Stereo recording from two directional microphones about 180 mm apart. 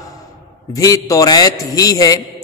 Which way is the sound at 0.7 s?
20° left (ahead or behind).